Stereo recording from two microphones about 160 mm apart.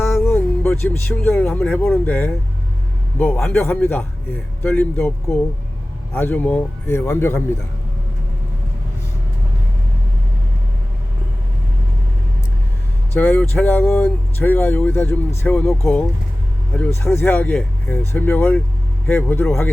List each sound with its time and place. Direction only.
0.2 s speech: 15° left (ahead or behind)
6.1 s speech: 10° left (ahead or behind)
13.1 s speech: 10° left (ahead or behind)